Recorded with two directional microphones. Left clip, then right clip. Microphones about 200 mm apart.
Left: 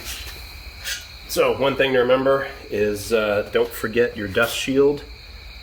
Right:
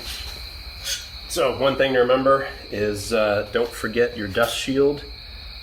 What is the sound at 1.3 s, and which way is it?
Speech, 55° left (ahead or behind).